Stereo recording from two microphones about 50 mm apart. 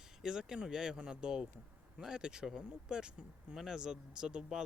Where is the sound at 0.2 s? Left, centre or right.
Centre.